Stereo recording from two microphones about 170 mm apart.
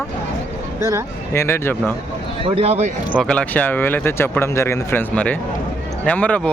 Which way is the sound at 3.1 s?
5° left (ahead or behind).